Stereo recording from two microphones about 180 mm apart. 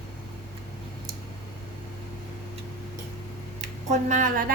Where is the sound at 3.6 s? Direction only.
45° right (ahead or behind).